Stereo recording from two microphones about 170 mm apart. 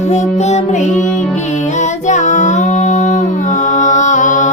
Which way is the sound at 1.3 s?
45° left (ahead or behind).